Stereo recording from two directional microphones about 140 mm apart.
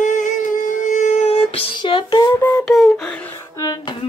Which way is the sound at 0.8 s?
55° left (ahead or behind).